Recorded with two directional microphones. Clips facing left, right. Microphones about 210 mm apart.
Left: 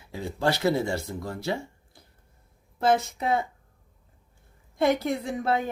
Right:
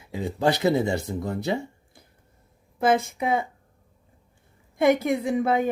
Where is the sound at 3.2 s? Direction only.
10° right (ahead or behind).